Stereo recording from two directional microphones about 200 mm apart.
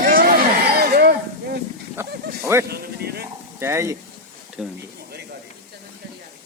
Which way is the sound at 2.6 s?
50° right (ahead or behind).